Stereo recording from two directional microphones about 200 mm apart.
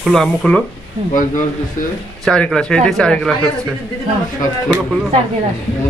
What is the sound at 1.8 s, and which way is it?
Speech, 45° left (ahead or behind).